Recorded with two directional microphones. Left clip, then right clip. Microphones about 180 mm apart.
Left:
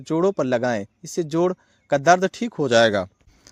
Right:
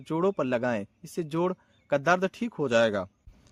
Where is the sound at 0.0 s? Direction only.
25° left (ahead or behind).